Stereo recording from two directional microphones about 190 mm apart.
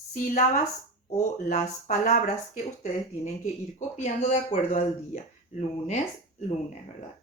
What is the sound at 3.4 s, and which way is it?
Speech, 40° left (ahead or behind).